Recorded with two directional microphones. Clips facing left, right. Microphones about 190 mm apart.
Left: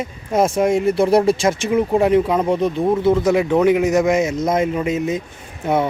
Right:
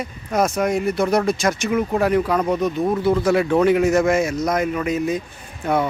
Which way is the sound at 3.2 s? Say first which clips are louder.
Left 2 dB; 15° left (ahead or behind).